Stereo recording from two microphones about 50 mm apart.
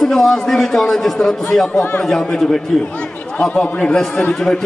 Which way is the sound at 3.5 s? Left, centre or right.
Left.